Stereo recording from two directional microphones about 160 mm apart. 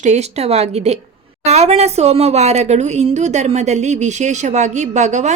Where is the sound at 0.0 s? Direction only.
45° right (ahead or behind).